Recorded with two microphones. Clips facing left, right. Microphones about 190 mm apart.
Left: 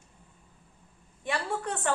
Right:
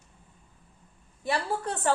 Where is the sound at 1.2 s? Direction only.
35° right (ahead or behind).